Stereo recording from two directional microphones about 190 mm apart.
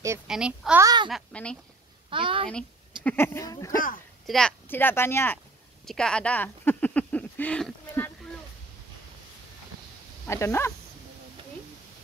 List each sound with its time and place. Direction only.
0.3 s a child's voice: 5° right (ahead or behind)
0.8 s speech: 25° right (ahead or behind)
1.1 s a child's voice: 5° left (ahead or behind)
2.0 s a sound: 25° right (ahead or behind)
3.0 s speech: 10° left (ahead or behind)
4.3 s speech: 5° left (ahead or behind)
5.9 s a sound: 5° left (ahead or behind)
10.2 s speech: 15° left (ahead or behind)